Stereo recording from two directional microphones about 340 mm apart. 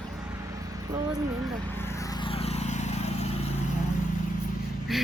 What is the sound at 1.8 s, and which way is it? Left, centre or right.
Vehicle, centre.